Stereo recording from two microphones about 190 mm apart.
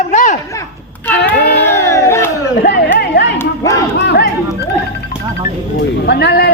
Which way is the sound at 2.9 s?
60° left (ahead or behind).